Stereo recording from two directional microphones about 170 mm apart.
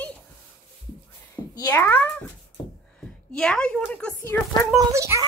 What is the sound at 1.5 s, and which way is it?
Speech, 20° left (ahead or behind).